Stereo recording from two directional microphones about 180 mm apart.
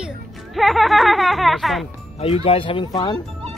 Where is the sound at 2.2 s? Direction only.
30° left (ahead or behind).